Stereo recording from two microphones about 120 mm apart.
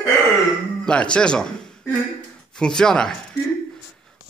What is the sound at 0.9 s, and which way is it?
Speech, 10° left (ahead or behind).